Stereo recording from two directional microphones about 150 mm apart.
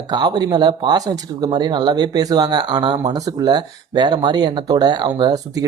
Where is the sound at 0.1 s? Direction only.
30° right (ahead or behind).